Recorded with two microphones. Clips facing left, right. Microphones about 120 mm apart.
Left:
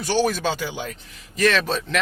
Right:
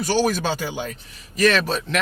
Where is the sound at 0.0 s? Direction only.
45° right (ahead or behind).